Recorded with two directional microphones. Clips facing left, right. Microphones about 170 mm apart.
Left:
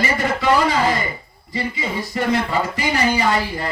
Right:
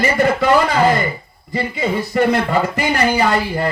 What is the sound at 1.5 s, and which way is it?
Music, 60° right (ahead or behind).